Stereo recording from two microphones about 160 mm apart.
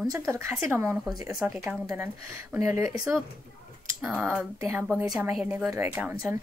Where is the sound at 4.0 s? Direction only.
5° right (ahead or behind).